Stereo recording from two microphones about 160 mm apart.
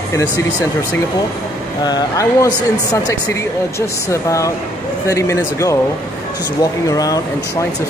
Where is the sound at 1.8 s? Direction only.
25° left (ahead or behind).